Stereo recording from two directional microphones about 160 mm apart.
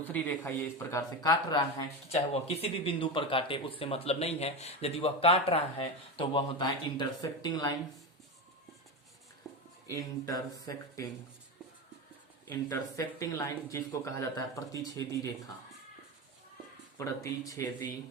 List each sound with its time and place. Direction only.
0.0 s speech: 10° left (ahead or behind)
2.0 s speech: 40° left (ahead or behind)
9.5 s a sound: centre (ahead or behind)
9.9 s speech: 20° left (ahead or behind)
12.5 s speech: 15° left (ahead or behind)
17.0 s speech: 20° left (ahead or behind)